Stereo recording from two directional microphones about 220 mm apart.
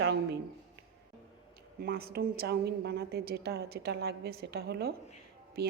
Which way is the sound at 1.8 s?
45° right (ahead or behind).